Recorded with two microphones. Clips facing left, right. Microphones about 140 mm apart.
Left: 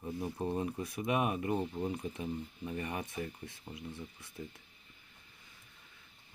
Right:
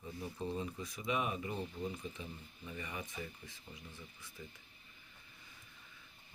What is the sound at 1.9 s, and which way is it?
Speech, 65° left (ahead or behind).